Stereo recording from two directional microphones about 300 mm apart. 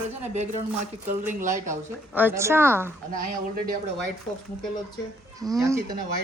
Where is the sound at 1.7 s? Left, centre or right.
Centre.